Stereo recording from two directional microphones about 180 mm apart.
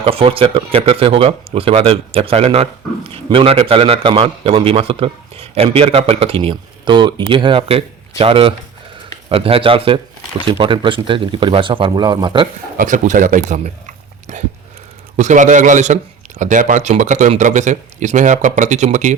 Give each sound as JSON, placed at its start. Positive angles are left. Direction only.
{"t": 0.0, "sound": "speech", "side_deg": -30}
{"t": 12.7, "sound": "speech", "side_deg": -45}